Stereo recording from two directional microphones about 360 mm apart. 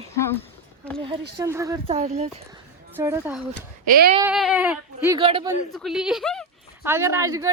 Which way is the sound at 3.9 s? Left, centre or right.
Right.